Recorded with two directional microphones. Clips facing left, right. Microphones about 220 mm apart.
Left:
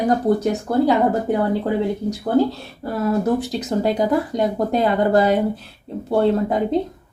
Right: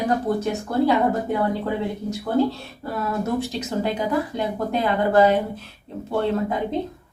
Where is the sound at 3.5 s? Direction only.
35° left (ahead or behind).